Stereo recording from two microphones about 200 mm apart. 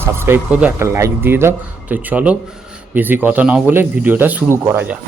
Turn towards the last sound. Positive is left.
turn(degrees=-10)  # may be behind; listen again after turning